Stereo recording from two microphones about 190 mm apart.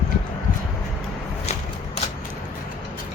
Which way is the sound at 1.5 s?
35° left (ahead or behind).